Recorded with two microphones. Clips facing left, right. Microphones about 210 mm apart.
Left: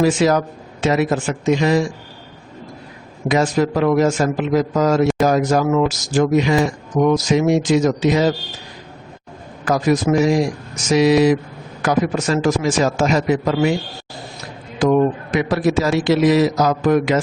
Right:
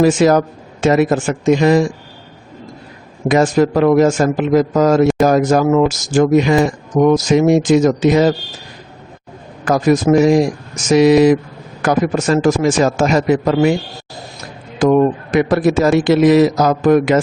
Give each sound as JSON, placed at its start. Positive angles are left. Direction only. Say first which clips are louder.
{"t": 0.0, "sound": "a man's voice", "louder": "right 4 dB", "side_deg": -50}
{"t": 3.2, "sound": "a man's voice", "louder": "right 4 dB", "side_deg": -50}
{"t": 9.6, "sound": "a man's voice", "louder": "right 4 dB", "side_deg": -45}
{"t": 14.8, "sound": "a man's voice", "louder": "right 3 dB", "side_deg": -50}